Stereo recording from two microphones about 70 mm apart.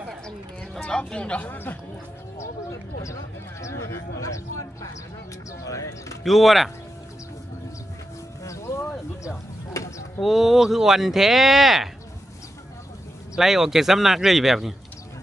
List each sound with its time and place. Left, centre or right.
0.7 s speech: centre
3.6 s speech: left
6.2 s speech: centre
8.5 s speech: left
10.2 s speech: centre
13.4 s speech: centre